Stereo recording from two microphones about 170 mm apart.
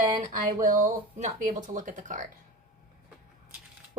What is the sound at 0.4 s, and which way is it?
A woman's voice, 50° right (ahead or behind).